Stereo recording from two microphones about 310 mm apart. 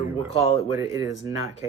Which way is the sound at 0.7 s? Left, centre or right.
Centre.